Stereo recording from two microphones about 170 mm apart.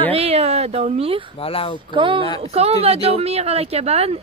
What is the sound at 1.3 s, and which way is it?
Speech, 35° left (ahead or behind).